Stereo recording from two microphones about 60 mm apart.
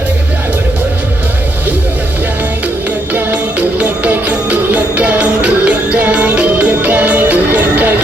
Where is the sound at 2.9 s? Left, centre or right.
Right.